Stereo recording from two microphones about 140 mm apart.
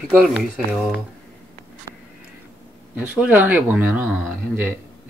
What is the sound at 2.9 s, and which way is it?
Speech, 10° right (ahead or behind).